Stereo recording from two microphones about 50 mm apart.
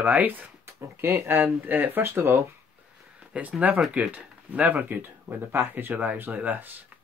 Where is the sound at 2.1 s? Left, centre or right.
Right.